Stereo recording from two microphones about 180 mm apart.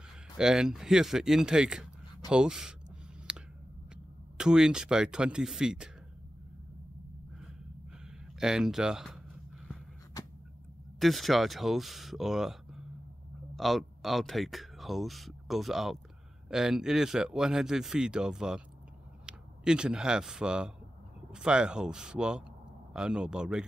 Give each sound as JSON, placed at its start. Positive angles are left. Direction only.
{"t": 0.4, "sound": "speech", "side_deg": -5}
{"t": 3.3, "sound": "a sound", "side_deg": -5}
{"t": 4.4, "sound": "speech", "side_deg": -5}
{"t": 8.4, "sound": "speech", "side_deg": -5}
{"t": 11.0, "sound": "speech", "side_deg": 0}